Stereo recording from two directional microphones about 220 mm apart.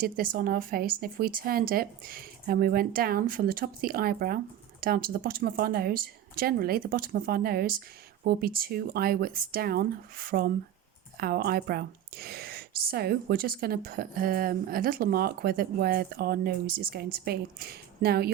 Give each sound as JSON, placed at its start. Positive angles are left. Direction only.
{"t": 0.0, "sound": "speech", "side_deg": -40}